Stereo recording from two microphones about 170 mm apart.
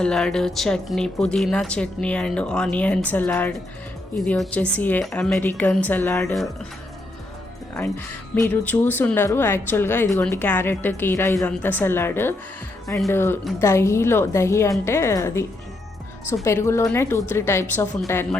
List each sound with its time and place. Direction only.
0.0 s a woman's voice: 5° left (ahead or behind)
8.4 s a woman's voice: 10° left (ahead or behind)